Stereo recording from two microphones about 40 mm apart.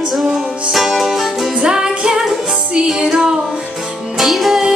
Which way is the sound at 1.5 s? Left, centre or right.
Right.